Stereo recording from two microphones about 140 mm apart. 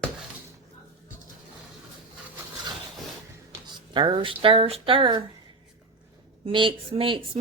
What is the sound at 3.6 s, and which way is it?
Speech, 35° right (ahead or behind).